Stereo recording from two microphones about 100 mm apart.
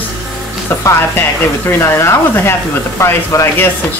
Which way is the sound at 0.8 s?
25° left (ahead or behind).